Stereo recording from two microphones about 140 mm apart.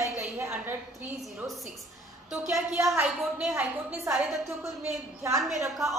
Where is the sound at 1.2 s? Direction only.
Centre (ahead or behind).